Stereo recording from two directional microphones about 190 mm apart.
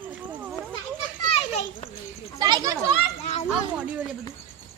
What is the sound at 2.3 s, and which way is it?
Speech, 20° right (ahead or behind).